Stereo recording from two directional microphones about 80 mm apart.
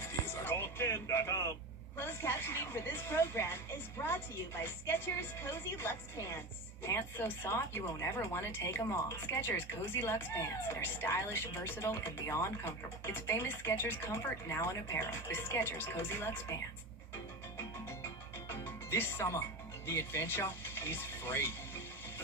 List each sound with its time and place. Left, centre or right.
0.4 s a sound: left
2.0 s speech: left
4.6 s speech: left
18.4 s music: left
19.9 s speech: left